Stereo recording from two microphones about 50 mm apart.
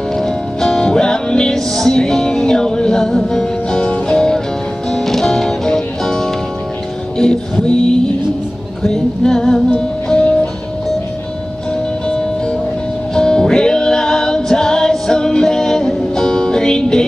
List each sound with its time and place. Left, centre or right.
0.1 s music: centre
7.6 s music: centre
8.8 s music: centre
13.1 s music: centre